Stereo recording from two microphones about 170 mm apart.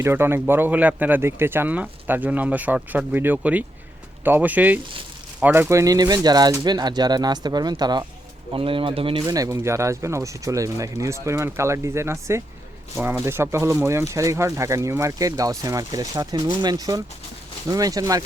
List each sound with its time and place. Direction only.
0.0 s speech: 15° right (ahead or behind); by 9.2 s 30° right (ahead or behind)
9.2 s speech: 20° right (ahead or behind)